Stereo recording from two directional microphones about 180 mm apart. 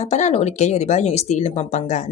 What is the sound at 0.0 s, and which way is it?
Speech, 40° left (ahead or behind).